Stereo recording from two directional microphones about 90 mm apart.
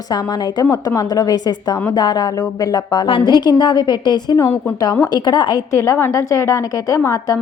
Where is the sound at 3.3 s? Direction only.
55° left (ahead or behind).